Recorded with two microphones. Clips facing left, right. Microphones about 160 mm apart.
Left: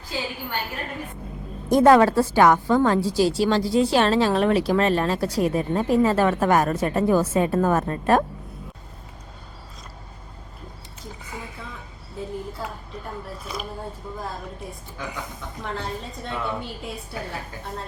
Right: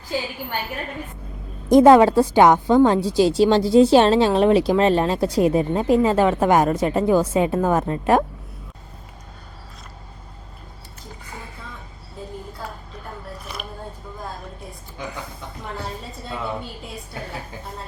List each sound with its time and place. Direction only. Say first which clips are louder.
1.7 s a woman's voice: right 4 dB; 15° right (ahead or behind)